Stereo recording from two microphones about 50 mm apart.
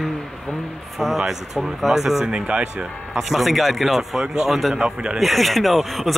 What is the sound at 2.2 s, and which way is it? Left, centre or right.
Speech, right.